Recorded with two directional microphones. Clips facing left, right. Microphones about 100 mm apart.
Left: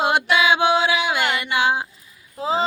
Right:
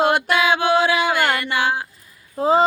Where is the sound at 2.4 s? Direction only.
45° right (ahead or behind).